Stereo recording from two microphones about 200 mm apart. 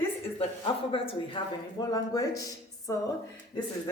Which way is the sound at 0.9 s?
25° left (ahead or behind).